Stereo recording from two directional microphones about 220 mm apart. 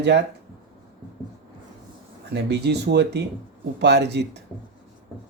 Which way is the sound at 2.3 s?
50° right (ahead or behind).